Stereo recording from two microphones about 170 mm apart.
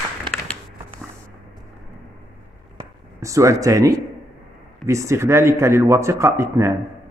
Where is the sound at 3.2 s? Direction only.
20° right (ahead or behind).